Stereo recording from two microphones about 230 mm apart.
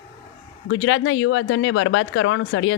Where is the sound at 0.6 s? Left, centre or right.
Left.